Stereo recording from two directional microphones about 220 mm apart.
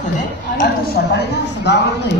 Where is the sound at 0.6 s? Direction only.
45° left (ahead or behind).